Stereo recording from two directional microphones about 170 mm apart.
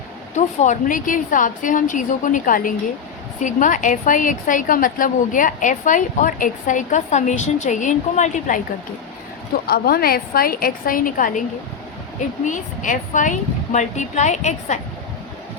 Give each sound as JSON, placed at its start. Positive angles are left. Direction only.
{"t": 0.3, "sound": "a woman's voice", "side_deg": 45}
{"t": 9.6, "sound": "a woman's voice", "side_deg": 65}
{"t": 12.5, "sound": "a woman's voice", "side_deg": 50}